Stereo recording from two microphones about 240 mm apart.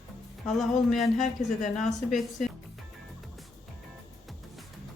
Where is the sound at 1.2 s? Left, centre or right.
Left.